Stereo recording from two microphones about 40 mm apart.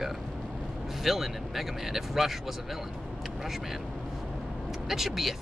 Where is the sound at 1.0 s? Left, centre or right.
Centre.